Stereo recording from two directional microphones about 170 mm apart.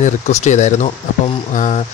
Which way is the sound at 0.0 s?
45° left (ahead or behind).